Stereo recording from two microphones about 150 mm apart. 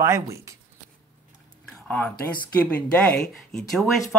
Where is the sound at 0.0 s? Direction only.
20° right (ahead or behind).